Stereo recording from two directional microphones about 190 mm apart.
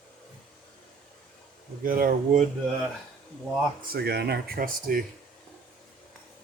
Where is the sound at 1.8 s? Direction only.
45° right (ahead or behind).